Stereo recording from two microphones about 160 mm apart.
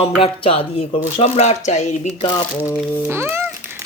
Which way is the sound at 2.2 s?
30° left (ahead or behind).